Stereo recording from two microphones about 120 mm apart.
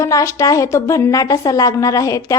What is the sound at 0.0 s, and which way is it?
A woman's voice, 25° left (ahead or behind).